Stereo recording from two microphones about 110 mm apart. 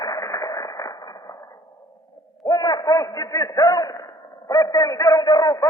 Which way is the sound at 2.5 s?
35° left (ahead or behind).